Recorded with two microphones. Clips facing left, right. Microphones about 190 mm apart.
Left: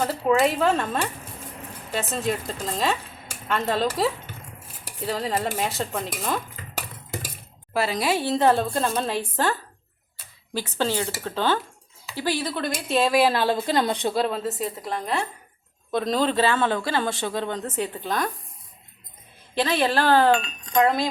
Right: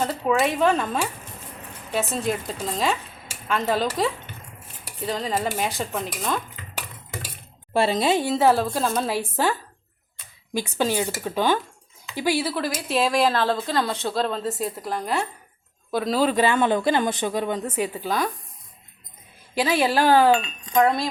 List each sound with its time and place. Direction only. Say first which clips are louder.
0.4 s a woman's voice: even; centre (ahead or behind)
7.7 s a woman's voice: right 3 dB; 25° right (ahead or behind); by 18.3 s 5° right (ahead or behind)
19.5 s speech: right 1 dB; 10° right (ahead or behind)